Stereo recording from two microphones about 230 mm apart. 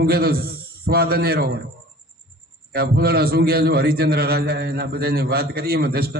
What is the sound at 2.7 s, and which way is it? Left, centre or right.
A man's voice, right.